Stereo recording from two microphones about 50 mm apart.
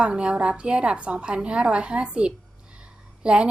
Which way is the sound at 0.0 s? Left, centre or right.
Centre.